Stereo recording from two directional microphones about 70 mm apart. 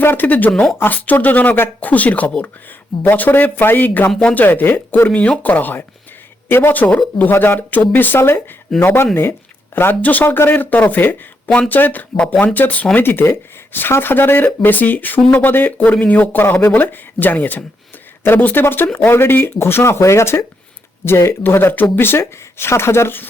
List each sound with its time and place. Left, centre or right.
0.0 s speech: left
4.2 s speech: centre
4.4 s speech: left
9.9 s speech: left